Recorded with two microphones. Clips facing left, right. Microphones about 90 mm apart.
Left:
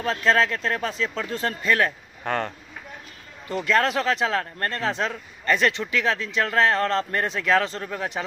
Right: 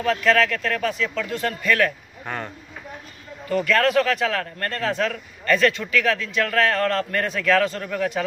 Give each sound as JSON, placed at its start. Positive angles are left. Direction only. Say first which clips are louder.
{"t": 0.0, "sound": "speech", "louder": "right 2 dB", "side_deg": 30}
{"t": 3.4, "sound": "speech", "louder": "right 2 dB", "side_deg": 25}